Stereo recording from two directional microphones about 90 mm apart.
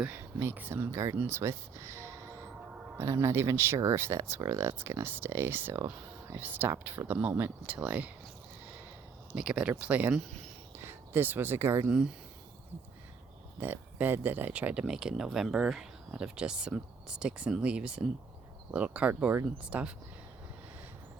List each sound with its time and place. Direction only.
0.0 s speech: 25° right (ahead or behind)
9.3 s speech: 10° right (ahead or behind); by 11.9 s 25° right (ahead or behind)
13.6 s speech: 20° right (ahead or behind)